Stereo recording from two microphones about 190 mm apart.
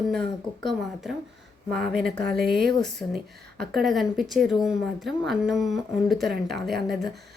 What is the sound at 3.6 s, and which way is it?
Speech, centre (ahead or behind).